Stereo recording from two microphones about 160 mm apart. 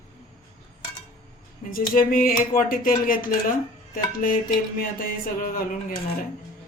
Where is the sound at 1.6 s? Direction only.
65° left (ahead or behind).